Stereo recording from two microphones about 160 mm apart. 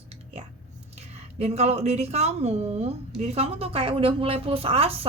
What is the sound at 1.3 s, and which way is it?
Speech, 40° right (ahead or behind).